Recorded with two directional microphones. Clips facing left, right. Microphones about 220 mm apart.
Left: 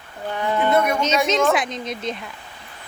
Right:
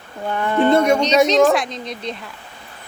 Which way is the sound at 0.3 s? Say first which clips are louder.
Right 4 dB; 55° right (ahead or behind).